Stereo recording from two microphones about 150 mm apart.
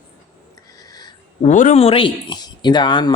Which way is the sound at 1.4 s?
55° left (ahead or behind).